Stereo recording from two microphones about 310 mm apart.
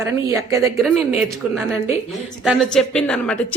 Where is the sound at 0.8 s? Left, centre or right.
Centre.